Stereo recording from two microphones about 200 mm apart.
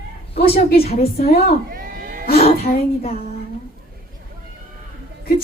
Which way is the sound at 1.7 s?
45° right (ahead or behind).